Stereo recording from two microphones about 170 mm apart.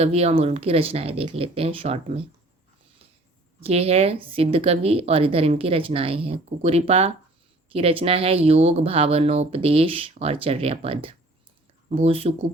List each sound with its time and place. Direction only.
0.0 s speech: 35° right (ahead or behind)
3.6 s speech: 35° right (ahead or behind)